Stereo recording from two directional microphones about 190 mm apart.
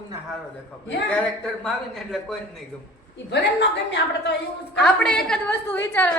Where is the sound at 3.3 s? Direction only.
65° left (ahead or behind).